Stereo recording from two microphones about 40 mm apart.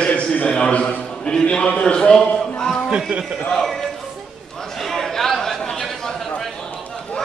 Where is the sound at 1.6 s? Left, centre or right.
Left.